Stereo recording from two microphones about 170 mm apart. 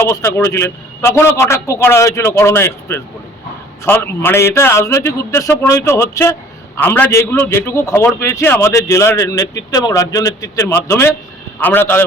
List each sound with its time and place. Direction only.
0.0 s a man's voice: 15° left (ahead or behind)